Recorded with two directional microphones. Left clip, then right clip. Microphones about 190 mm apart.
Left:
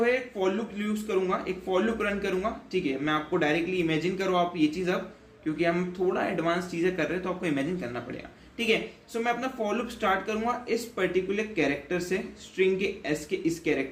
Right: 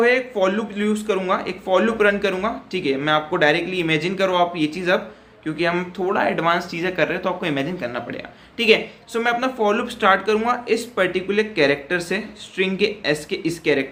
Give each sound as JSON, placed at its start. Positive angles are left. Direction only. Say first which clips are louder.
{"t": 0.0, "sound": "speech", "louder": "right 9 dB", "side_deg": -20}